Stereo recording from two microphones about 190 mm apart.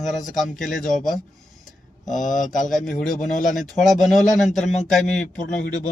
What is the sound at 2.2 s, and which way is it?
Speech, 45° left (ahead or behind).